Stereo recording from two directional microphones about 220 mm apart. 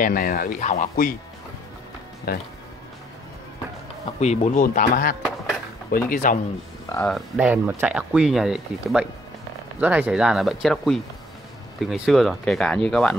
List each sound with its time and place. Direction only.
0.0 s speech: 40° left (ahead or behind)
2.3 s speech: 45° left (ahead or behind)
4.2 s speech: 30° left (ahead or behind)
6.9 s speech: 5° left (ahead or behind)